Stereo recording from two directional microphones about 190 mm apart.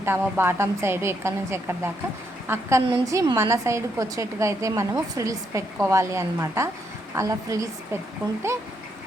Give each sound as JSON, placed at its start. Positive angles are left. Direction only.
{"t": 0.0, "sound": "a woman's voice", "side_deg": -10}